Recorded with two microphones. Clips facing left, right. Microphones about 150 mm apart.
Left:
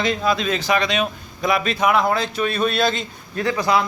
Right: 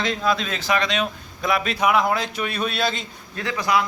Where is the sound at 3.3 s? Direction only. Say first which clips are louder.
Left 6 dB; 40° left (ahead or behind).